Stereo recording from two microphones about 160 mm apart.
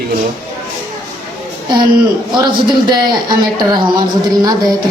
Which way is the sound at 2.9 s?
25° right (ahead or behind).